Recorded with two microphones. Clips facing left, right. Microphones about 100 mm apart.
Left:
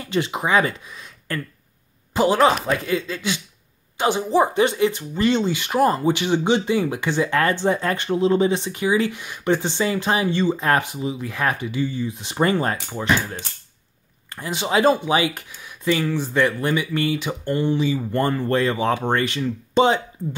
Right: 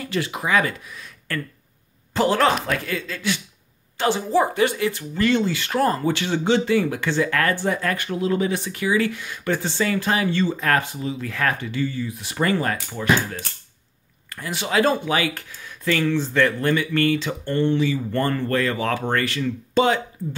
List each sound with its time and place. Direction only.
0.0 s speech: 20° left (ahead or behind)